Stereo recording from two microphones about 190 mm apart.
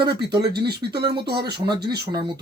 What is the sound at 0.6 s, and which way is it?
Speech, 60° right (ahead or behind).